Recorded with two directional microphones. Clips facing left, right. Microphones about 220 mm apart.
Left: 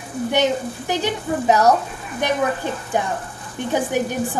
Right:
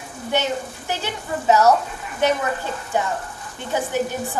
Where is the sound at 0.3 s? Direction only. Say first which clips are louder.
Left 3 dB; 15° left (ahead or behind).